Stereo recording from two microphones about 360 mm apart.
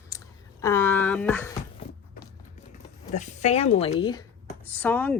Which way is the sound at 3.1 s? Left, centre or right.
Centre.